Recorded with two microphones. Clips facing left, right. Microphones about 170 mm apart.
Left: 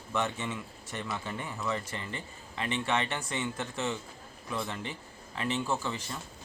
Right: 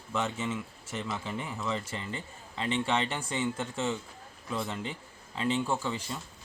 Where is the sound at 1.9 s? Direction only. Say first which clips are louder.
Right 1 dB; 25° right (ahead or behind).